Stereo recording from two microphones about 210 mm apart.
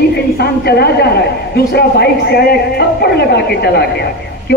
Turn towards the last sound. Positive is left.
turn(degrees=50)  # may be behind; listen again after turning